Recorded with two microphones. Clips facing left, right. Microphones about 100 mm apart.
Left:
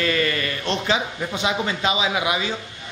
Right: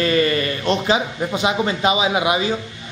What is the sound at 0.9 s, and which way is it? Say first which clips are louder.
A man's voice: right 4 dB; 15° right (ahead or behind).